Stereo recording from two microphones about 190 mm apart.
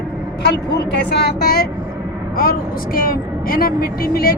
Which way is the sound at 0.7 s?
65° left (ahead or behind).